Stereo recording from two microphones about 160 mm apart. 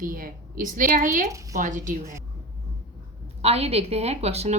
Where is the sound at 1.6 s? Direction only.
55° right (ahead or behind).